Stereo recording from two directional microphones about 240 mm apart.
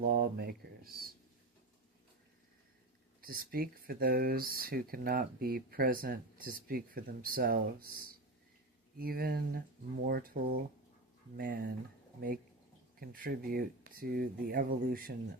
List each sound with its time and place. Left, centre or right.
0.0 s speech: right
3.2 s speech: right
9.0 s speech: right